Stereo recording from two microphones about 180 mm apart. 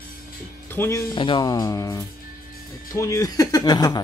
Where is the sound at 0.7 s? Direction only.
15° left (ahead or behind).